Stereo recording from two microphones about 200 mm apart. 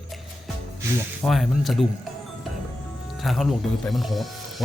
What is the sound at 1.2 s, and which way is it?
Speech, centre (ahead or behind).